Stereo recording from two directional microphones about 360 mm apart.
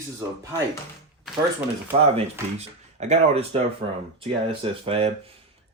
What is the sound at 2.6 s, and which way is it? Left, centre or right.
Speech, centre.